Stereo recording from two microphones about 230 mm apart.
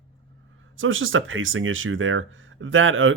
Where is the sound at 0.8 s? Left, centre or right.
Right.